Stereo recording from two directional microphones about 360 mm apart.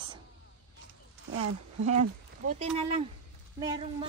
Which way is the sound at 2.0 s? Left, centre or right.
Centre.